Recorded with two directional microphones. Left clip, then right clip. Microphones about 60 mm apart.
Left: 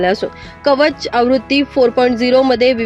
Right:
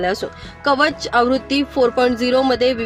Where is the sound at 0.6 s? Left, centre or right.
Left.